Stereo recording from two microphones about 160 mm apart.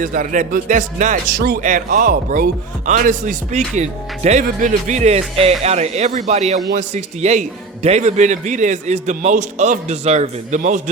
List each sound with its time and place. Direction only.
0.0 s a man's voice: 55° right (ahead or behind)
1.4 s a man's voice: 65° right (ahead or behind)